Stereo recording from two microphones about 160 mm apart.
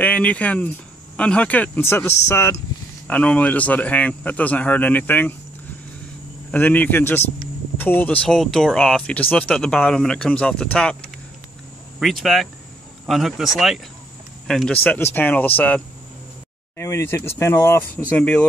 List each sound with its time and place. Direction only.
0.0 s speech: 10° left (ahead or behind)
6.5 s speech: 10° left (ahead or behind)
12.0 s speech: centre (ahead or behind)